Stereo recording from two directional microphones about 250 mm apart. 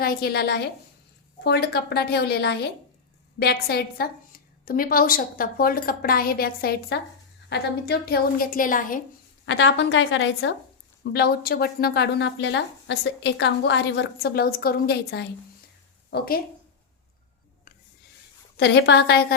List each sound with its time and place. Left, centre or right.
0.0 s a woman's voice: left
9.5 s a woman's voice: left
18.5 s a woman's voice: left